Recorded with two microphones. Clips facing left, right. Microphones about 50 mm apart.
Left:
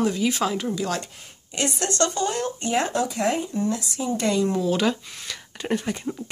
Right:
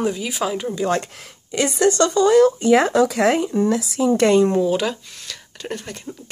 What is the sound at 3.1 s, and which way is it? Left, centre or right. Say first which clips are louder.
Speech: right 6 dB; right.